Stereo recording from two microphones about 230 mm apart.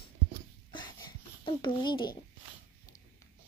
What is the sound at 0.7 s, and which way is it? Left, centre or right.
Babbling, centre.